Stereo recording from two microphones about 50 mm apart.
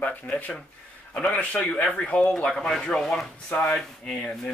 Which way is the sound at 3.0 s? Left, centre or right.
Centre.